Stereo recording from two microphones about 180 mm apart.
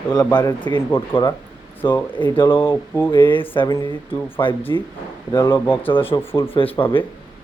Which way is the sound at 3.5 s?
25° left (ahead or behind).